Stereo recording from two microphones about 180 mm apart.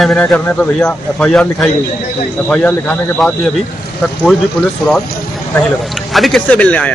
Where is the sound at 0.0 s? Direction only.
5° left (ahead or behind).